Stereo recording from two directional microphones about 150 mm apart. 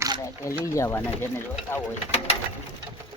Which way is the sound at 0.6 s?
20° left (ahead or behind).